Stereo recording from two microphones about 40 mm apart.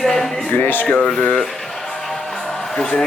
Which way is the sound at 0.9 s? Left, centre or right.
Left.